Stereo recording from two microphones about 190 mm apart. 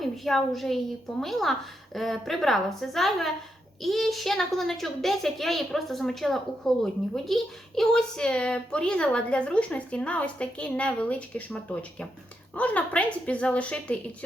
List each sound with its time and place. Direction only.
0.0 s a woman's voice: centre (ahead or behind)